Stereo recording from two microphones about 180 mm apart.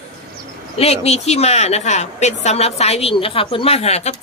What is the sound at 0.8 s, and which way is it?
A woman's voice, 35° left (ahead or behind).